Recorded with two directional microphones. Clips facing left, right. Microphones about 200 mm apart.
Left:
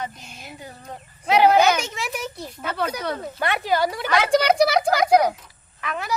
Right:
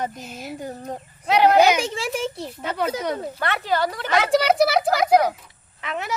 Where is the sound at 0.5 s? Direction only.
45° right (ahead or behind).